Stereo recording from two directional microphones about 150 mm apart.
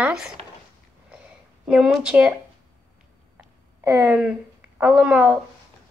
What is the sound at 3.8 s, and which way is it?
Speech, 20° right (ahead or behind).